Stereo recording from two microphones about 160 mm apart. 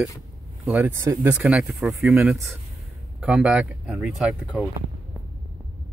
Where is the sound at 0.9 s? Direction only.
15° right (ahead or behind).